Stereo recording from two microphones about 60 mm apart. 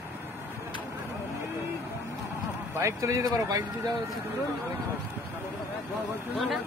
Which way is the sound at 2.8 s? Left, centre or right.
Right.